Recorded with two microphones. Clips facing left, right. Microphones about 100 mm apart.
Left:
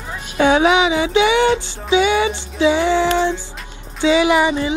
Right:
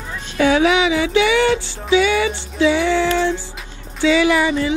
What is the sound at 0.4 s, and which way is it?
Music, 25° left (ahead or behind).